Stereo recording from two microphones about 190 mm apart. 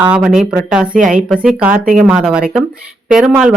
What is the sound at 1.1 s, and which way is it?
Speech, 5° right (ahead or behind).